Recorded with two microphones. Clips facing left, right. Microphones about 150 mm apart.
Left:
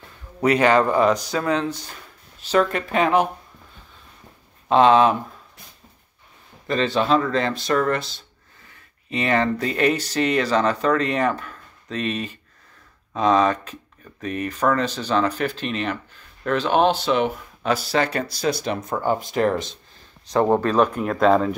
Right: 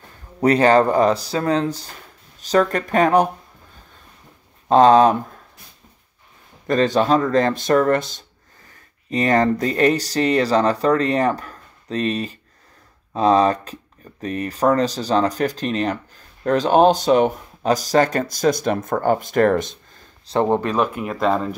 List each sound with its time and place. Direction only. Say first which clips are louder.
0.4 s speech: right 3 dB; 35° right (ahead or behind)
4.6 s speech: right 3 dB; 40° right (ahead or behind)
6.7 s speech: right 3 dB; 45° right (ahead or behind)
20.3 s speech: even; 30° right (ahead or behind)
20.6 s speech: left 2 dB; 10° right (ahead or behind)